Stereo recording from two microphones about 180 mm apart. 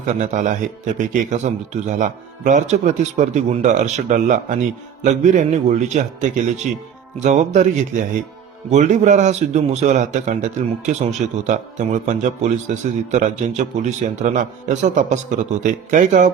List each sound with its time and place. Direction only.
0.1 s a man's voice: 45° right (ahead or behind)